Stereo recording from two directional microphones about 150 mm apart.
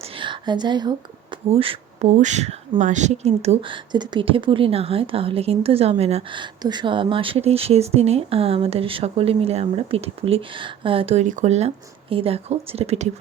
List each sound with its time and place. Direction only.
0.2 s a woman's voice: 30° right (ahead or behind)
1.5 s speech: 40° right (ahead or behind)
2.0 s speech: 50° right (ahead or behind)
3.9 s a woman's voice: 30° right (ahead or behind)